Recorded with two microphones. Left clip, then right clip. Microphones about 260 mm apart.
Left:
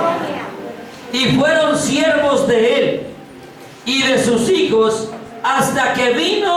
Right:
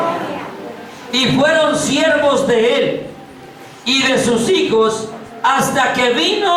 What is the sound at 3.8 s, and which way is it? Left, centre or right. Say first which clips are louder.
Speech: right 1 dB; centre.